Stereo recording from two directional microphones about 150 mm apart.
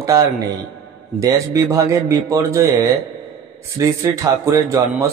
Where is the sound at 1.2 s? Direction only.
20° right (ahead or behind).